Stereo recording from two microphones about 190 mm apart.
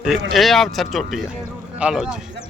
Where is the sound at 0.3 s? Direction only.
Centre (ahead or behind).